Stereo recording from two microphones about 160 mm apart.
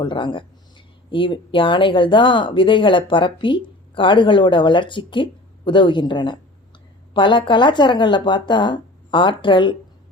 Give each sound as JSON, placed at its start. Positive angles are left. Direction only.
{"t": 0.0, "sound": "speech", "side_deg": 30}